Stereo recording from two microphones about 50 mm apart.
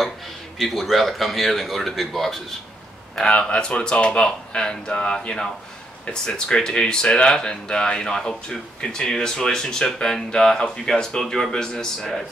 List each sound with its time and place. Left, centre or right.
0.6 s speech: centre
3.2 s speech: left